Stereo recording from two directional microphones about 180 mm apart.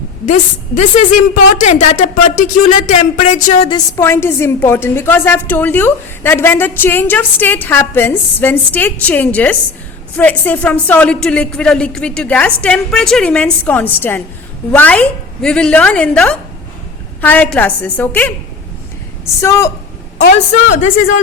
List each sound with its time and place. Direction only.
0.3 s a woman's voice: 40° left (ahead or behind)
3.7 s a woman's voice: 20° left (ahead or behind)